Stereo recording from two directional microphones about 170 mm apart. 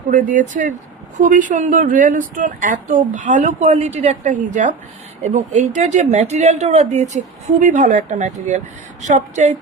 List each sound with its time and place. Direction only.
0.1 s speech: 50° right (ahead or behind)